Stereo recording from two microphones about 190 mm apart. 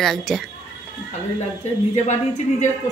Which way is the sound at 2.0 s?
40° left (ahead or behind).